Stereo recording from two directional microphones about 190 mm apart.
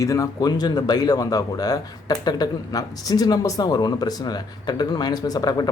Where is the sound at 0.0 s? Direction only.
15° left (ahead or behind).